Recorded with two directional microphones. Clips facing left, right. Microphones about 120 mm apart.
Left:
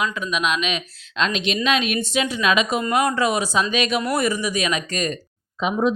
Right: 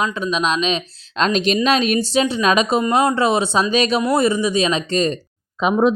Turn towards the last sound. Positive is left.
turn(degrees=-50)  # may be behind; listen again after turning